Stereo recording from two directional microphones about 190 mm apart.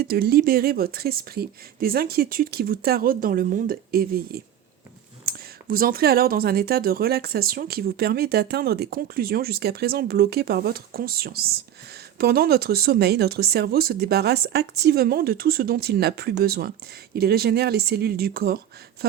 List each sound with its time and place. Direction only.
0.0 s speech: 55° right (ahead or behind)